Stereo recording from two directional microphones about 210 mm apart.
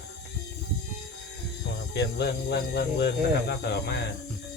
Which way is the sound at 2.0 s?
55° left (ahead or behind).